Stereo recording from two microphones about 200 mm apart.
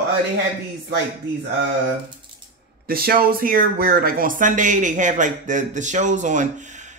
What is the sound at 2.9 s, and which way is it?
Speech, 50° right (ahead or behind).